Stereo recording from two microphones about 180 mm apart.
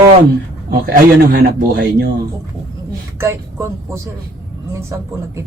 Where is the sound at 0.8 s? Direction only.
55° right (ahead or behind).